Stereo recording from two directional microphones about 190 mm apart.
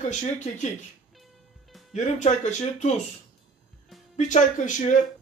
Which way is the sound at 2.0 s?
40° left (ahead or behind).